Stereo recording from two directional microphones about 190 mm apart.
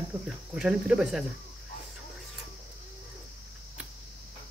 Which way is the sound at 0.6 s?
5° right (ahead or behind).